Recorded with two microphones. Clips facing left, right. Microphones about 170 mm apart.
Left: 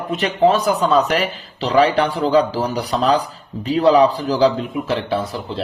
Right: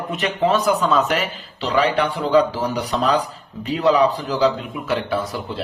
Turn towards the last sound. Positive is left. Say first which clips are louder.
# left 2 dB
turn(degrees=30)  # may be behind; listen again after turning